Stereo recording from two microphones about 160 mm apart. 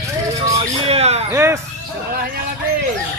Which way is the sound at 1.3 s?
15° right (ahead or behind).